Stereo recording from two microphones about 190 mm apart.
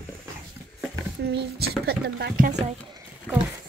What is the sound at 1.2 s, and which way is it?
Speech, 55° right (ahead or behind).